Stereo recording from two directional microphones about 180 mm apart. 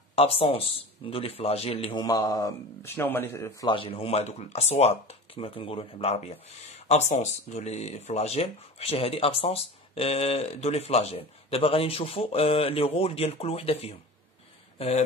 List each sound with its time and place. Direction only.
0.1 s speech: 30° left (ahead or behind); by 3.5 s 10° left (ahead or behind)
3.6 s speech: 30° left (ahead or behind)